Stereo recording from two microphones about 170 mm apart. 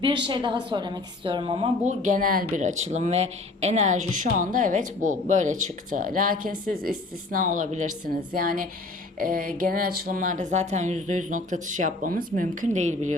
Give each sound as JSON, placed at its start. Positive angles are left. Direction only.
{"t": 0.3, "sound": "a woman's voice", "side_deg": -30}
{"t": 8.4, "sound": "a woman's voice", "side_deg": -55}